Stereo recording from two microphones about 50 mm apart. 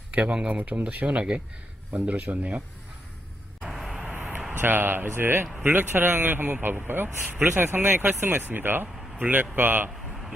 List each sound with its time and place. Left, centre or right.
0.1 s speech: right
3.6 s vehicle: centre
4.5 s speech: right